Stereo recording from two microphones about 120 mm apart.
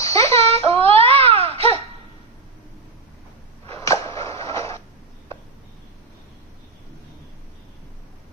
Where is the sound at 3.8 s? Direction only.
25° left (ahead or behind).